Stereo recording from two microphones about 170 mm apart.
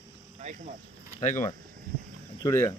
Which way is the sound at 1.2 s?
50° left (ahead or behind).